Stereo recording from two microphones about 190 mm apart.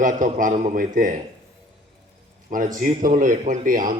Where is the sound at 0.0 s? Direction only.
45° right (ahead or behind).